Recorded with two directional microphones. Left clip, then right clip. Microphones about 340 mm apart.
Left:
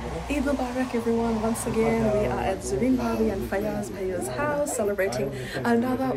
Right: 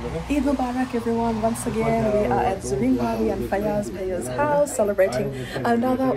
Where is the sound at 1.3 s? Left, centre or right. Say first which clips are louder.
Right 3 dB; left.